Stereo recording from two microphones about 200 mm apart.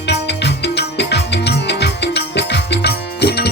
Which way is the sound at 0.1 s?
60° left (ahead or behind).